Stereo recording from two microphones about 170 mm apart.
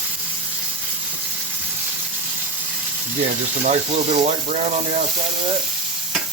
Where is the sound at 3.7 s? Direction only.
40° right (ahead or behind).